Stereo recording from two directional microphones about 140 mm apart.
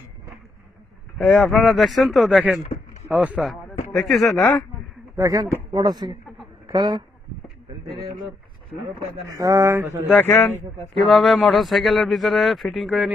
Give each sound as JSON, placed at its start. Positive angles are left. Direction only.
{"t": 1.1, "sound": "a man's voice", "side_deg": 0}
{"t": 5.1, "sound": "a man's voice", "side_deg": -25}
{"t": 9.3, "sound": "speech", "side_deg": -25}
{"t": 10.0, "sound": "a man's voice", "side_deg": 10}
{"t": 11.1, "sound": "a man's voice", "side_deg": 0}